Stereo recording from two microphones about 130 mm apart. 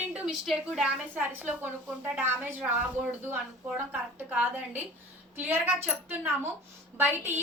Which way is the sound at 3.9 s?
15° right (ahead or behind).